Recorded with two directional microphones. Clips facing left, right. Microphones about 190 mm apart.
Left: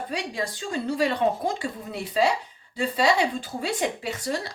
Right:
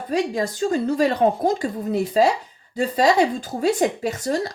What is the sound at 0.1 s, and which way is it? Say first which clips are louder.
Speech: right 12 dB; 45° right (ahead or behind).